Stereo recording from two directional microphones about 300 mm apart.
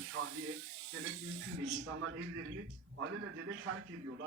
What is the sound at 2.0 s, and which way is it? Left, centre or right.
A woman's voice, right.